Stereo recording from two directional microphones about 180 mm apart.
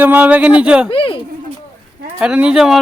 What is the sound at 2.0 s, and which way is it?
Speech, 5° right (ahead or behind).